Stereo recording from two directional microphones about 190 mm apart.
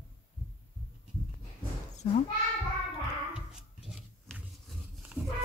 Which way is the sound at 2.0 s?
35° left (ahead or behind).